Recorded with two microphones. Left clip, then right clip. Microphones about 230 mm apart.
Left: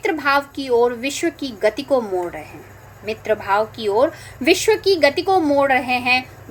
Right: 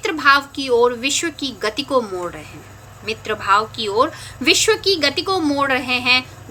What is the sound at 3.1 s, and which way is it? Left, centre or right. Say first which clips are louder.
A woman's voice: right 2 dB; centre.